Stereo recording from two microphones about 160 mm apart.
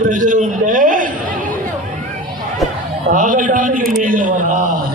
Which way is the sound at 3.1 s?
55° right (ahead or behind).